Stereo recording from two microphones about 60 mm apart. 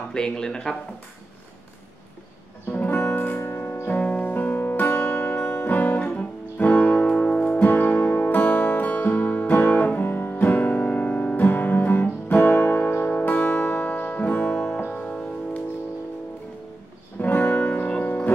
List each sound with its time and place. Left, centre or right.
0.1 s speech: centre
2.7 s music: left
5.6 s guitar: left
7.6 s music: left
10.0 s music: left
14.9 s music: centre
17.2 s music: left